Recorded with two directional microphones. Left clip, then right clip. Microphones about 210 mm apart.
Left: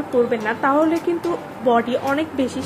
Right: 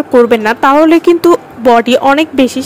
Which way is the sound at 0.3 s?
55° right (ahead or behind).